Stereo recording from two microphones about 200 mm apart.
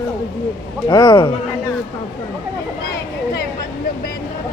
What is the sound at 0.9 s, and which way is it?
Speech, 20° left (ahead or behind).